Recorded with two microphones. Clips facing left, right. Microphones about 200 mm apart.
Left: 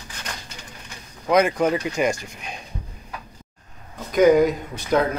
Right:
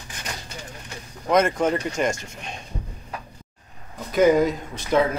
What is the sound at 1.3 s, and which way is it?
Speech, centre (ahead or behind).